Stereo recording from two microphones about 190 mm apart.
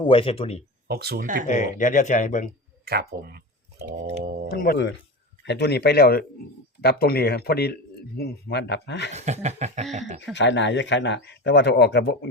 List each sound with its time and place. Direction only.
0.0 s speech: 30° left (ahead or behind)
0.9 s speech: 55° right (ahead or behind)
1.5 s speech: 40° left (ahead or behind)
2.8 s speech: 55° right (ahead or behind)
4.4 s speech: 55° left (ahead or behind)
9.1 s speech: 35° right (ahead or behind)
10.3 s speech: 70° left (ahead or behind)